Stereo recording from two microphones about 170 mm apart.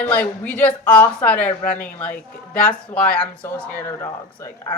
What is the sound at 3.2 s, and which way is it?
Speech, 15° left (ahead or behind).